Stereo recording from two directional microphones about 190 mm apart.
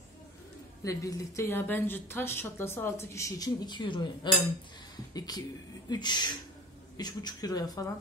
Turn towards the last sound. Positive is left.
turn(degrees=20)  # may be behind; listen again after turning